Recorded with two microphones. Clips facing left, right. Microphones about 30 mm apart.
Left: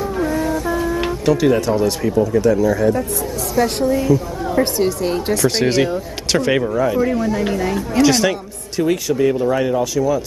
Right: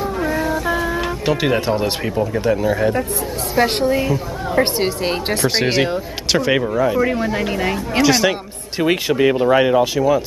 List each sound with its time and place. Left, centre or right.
0.2 s music: right
1.2 s a woman's voice: right
5.4 s speech: right
6.3 s speech: centre
7.0 s a woman's voice: right
8.0 s speech: centre
8.8 s a woman's voice: right